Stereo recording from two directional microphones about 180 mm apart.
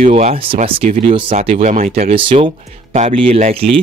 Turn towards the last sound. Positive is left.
turn(degrees=-35)  # may be behind; listen again after turning